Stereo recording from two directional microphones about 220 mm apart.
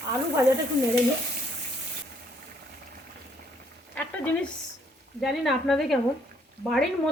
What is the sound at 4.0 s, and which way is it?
Speech, 5° left (ahead or behind).